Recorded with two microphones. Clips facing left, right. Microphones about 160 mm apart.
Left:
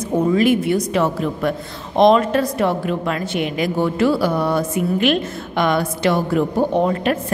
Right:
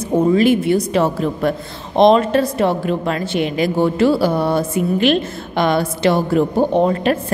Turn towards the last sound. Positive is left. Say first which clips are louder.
# right 2 dB
turn(degrees=-30)  # may be behind; listen again after turning